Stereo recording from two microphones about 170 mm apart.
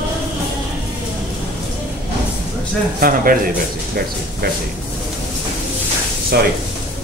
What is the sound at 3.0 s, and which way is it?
Speech, 60° right (ahead or behind).